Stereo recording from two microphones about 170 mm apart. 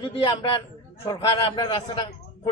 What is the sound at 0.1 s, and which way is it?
Speech, 30° left (ahead or behind).